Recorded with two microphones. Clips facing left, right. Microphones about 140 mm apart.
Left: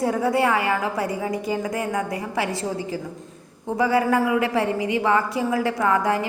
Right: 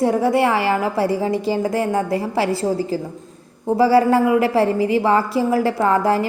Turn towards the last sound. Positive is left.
turn(degrees=-35)  # may be behind; listen again after turning